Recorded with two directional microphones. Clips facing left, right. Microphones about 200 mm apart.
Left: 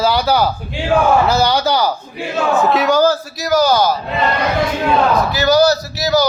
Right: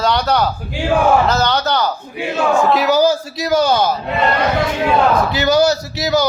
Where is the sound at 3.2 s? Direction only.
25° right (ahead or behind).